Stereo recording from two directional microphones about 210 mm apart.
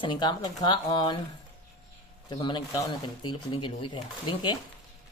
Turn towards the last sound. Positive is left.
turn(degrees=20)  # may be behind; listen again after turning